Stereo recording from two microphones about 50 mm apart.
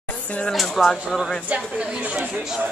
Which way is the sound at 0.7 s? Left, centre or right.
Centre.